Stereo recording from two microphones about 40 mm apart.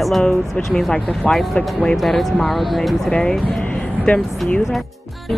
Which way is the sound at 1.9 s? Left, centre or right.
Centre.